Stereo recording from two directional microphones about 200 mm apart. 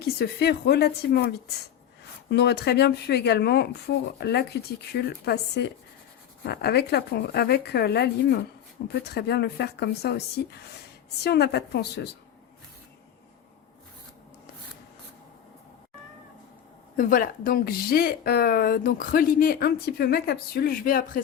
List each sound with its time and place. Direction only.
0.2 s speech: 55° left (ahead or behind)
17.0 s speech: 45° left (ahead or behind)